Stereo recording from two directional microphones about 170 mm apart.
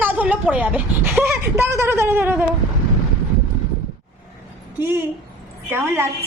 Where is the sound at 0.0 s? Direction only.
10° right (ahead or behind).